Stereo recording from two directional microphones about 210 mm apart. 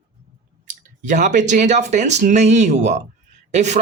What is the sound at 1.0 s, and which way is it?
Speech, 35° right (ahead or behind).